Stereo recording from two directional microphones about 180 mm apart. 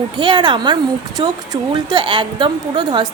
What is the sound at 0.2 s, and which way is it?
A woman's voice, 25° right (ahead or behind).